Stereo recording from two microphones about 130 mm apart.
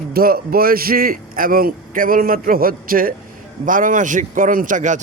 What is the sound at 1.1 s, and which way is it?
A man's voice, 90° right.